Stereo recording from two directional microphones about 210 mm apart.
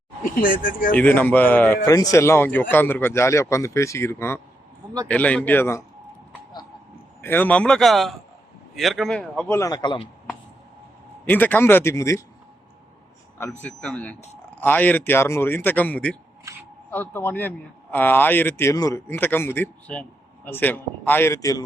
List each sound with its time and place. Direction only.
0.3 s speech: 40° left (ahead or behind)
0.9 s speech: 10° left (ahead or behind)
7.2 s a man's voice: 10° left (ahead or behind)
11.3 s speech: 10° left (ahead or behind)
13.4 s speech: 10° left (ahead or behind)